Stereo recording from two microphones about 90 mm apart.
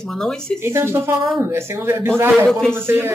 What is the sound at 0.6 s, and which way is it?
Speech, 30° right (ahead or behind).